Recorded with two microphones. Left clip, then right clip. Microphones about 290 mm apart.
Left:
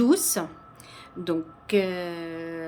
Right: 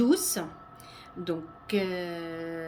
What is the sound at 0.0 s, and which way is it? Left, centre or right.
Speech, centre.